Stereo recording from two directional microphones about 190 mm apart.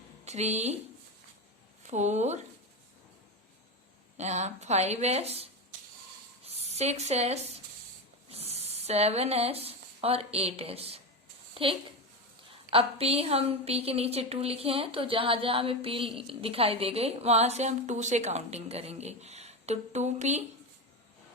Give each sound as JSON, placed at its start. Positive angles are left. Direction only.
{"t": 0.3, "sound": "a woman's voice", "side_deg": -35}
{"t": 1.8, "sound": "speech", "side_deg": -35}
{"t": 4.2, "sound": "a woman's voice", "side_deg": -35}